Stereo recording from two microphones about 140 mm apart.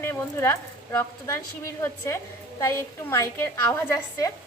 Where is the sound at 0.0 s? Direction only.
20° left (ahead or behind).